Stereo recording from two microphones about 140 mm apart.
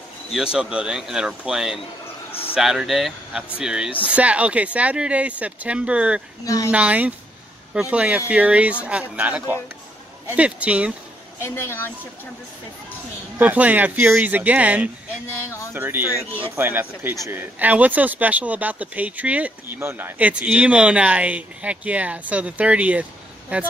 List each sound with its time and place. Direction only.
0.3 s speech: 5° right (ahead or behind)
6.4 s speech: 25° left (ahead or behind)
6.7 s speech: 10° right (ahead or behind)
11.4 s a woman's voice: 15° left (ahead or behind)
13.4 s speech: 10° right (ahead or behind)
15.4 s speech: 20° left (ahead or behind)
15.7 s speech: 15° right (ahead or behind)